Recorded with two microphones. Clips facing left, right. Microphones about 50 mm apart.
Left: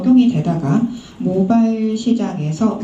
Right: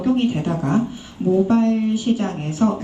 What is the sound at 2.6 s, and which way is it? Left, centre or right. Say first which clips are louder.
Speech: left 1 dB; centre.